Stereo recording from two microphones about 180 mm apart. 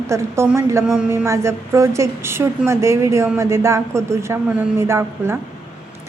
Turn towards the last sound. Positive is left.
turn(degrees=-15)  # may be behind; listen again after turning